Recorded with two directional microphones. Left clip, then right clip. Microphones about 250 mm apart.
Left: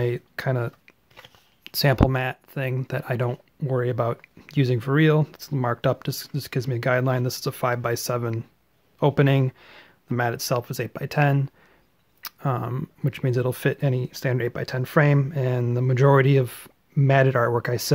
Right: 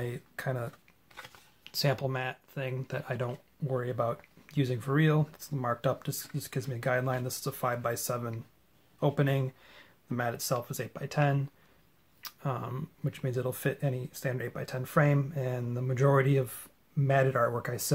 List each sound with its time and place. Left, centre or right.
0.0 s speech: left